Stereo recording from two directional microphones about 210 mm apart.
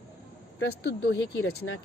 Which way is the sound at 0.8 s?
55° left (ahead or behind).